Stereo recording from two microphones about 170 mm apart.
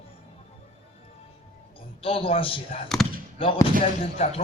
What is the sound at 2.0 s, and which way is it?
A man's voice, 35° left (ahead or behind).